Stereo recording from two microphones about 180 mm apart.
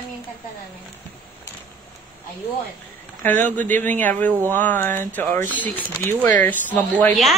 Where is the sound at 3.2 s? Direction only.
10° left (ahead or behind).